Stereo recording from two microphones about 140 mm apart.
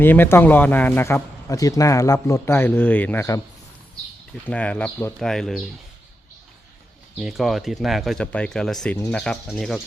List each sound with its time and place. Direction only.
0.0 s a man's voice: 15° left (ahead or behind)
4.4 s a man's voice: 10° left (ahead or behind)
7.2 s speech: centre (ahead or behind)